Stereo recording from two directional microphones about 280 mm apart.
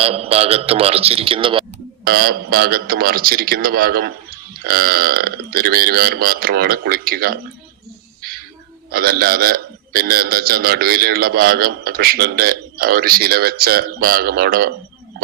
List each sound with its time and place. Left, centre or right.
0.0 s a man's voice: right
2.0 s a man's voice: right
8.9 s a man's voice: right